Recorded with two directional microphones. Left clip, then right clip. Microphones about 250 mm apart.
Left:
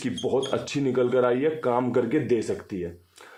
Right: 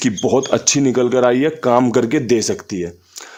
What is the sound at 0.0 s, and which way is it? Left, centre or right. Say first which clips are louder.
Speech: right 9 dB; right.